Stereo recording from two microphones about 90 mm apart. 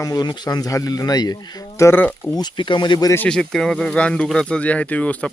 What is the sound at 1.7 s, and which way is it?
Speech, 30° left (ahead or behind).